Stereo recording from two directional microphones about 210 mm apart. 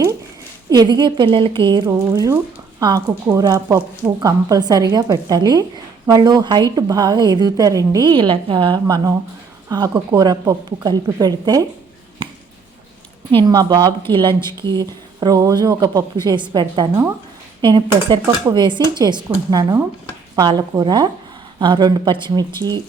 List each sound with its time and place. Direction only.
0.7 s a woman's voice: 20° right (ahead or behind)
13.3 s a woman's voice: 20° right (ahead or behind)